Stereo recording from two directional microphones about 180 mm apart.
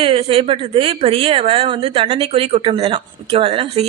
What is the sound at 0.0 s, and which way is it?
A woman's voice, 30° right (ahead or behind).